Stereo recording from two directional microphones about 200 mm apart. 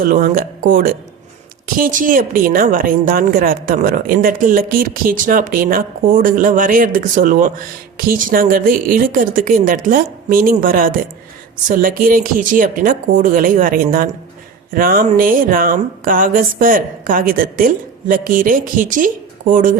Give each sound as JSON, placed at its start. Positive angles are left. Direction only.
{"t": 0.0, "sound": "speech", "side_deg": -45}